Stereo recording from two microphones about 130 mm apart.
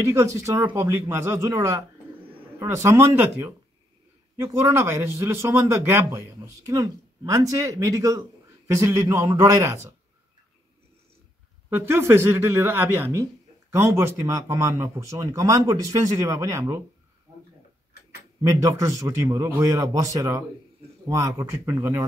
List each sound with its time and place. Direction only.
0.0 s speech: 20° right (ahead or behind)
11.7 s speech: 20° right (ahead or behind)
18.6 s speech: 25° right (ahead or behind)